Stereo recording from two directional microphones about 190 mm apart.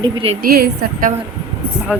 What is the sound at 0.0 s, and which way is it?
Speech, 30° right (ahead or behind).